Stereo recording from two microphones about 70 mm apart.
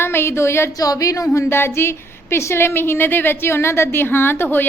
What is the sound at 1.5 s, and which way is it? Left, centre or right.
A woman's voice, left.